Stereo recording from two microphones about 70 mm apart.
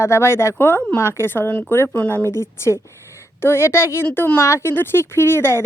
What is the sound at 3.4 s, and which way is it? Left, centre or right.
Speech, left.